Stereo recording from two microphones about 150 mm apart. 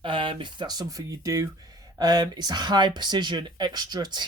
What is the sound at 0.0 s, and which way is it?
Speech, 35° right (ahead or behind).